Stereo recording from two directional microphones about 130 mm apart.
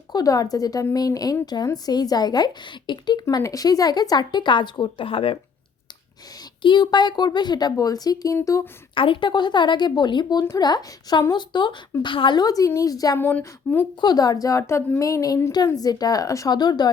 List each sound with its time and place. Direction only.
0.1 s a woman's voice: 30° left (ahead or behind)
3.2 s a woman's voice: 25° left (ahead or behind); by 5.4 s 45° left (ahead or behind)
6.6 s a woman's voice: 35° left (ahead or behind)
9.0 s a woman's voice: 40° left (ahead or behind)
13.1 s speech: 15° left (ahead or behind)
14.0 s a woman's voice: 30° left (ahead or behind)